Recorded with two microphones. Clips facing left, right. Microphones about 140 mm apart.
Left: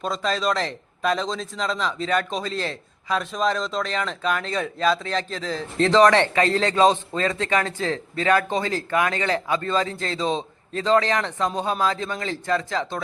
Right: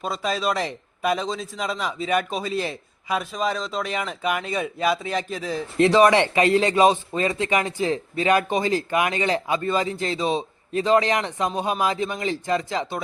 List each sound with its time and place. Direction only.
0.0 s a man's voice: 5° right (ahead or behind)